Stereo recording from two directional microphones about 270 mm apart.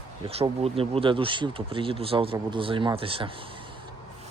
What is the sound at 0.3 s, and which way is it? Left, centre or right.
Speech, right.